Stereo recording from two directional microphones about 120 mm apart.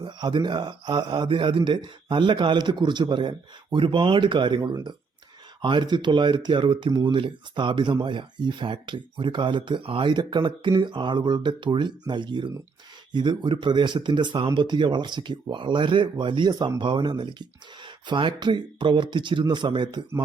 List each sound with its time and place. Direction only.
0.0 s speech: 40° right (ahead or behind)